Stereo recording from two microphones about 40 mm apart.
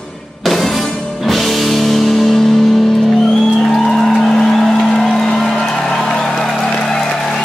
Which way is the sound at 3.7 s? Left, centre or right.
Centre.